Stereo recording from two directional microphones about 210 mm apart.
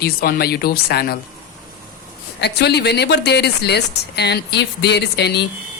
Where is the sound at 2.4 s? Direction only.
55° left (ahead or behind).